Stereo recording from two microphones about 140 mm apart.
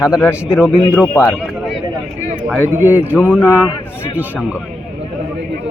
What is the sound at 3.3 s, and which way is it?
Speech, 15° left (ahead or behind).